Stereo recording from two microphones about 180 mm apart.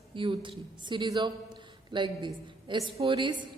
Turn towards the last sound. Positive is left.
turn(degrees=-30)  # may be behind; listen again after turning